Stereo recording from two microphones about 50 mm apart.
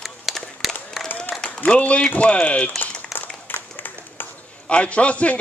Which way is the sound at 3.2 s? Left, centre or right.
Left.